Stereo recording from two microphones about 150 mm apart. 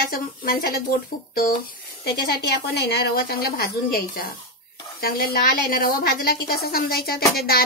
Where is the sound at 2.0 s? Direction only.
90° left.